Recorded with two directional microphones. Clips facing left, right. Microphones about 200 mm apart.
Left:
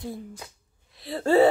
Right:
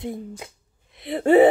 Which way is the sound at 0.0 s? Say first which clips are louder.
Right 4 dB; 20° right (ahead or behind).